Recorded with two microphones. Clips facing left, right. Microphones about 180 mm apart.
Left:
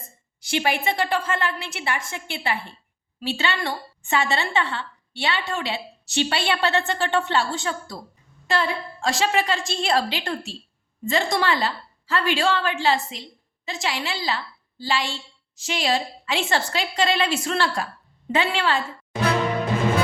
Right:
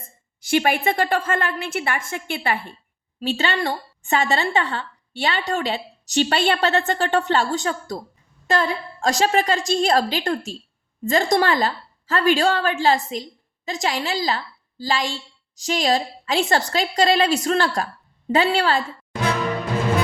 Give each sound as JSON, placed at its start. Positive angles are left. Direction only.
{"t": 0.4, "sound": "a woman's voice", "side_deg": -50}